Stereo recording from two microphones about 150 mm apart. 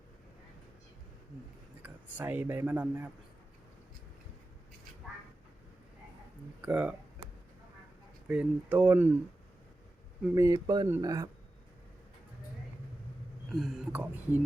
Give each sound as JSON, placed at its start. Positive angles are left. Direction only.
{"t": 1.8, "sound": "speech", "side_deg": -10}
{"t": 6.6, "sound": "speech", "side_deg": -10}
{"t": 8.3, "sound": "speech", "side_deg": -10}
{"t": 10.3, "sound": "speech", "side_deg": -25}
{"t": 13.5, "sound": "speech", "side_deg": 0}
{"t": 13.9, "sound": "speech", "side_deg": -10}